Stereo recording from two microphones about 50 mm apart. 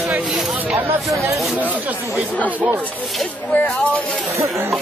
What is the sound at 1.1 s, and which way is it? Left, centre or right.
Speech, right.